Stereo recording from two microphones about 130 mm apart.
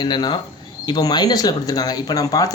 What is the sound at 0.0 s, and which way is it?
Speech, 35° left (ahead or behind).